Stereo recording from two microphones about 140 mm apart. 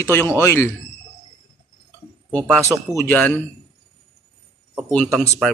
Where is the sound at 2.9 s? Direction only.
20° left (ahead or behind).